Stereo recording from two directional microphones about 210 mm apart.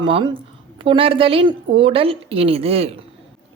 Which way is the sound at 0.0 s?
25° right (ahead or behind).